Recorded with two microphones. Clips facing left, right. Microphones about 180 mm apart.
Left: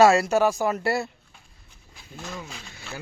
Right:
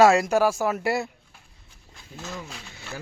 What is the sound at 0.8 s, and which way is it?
Speech, 15° right (ahead or behind).